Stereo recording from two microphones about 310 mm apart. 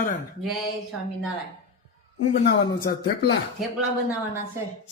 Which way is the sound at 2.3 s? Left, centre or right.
Left.